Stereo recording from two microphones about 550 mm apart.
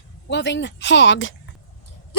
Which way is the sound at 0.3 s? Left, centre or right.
Centre.